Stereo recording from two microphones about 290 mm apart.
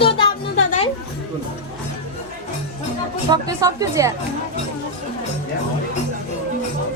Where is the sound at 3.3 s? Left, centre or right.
Centre.